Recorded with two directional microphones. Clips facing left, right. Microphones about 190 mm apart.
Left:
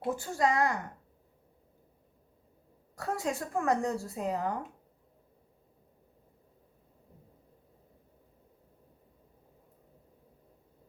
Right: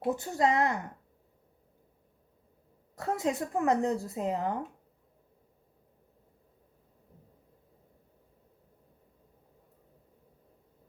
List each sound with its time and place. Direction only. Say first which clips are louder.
0.1 s speech: right 2 dB; 20° right (ahead or behind)
3.0 s speech: right 3 dB; 20° right (ahead or behind)